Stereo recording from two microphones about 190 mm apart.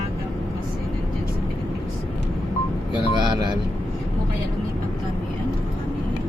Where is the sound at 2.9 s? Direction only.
25° right (ahead or behind).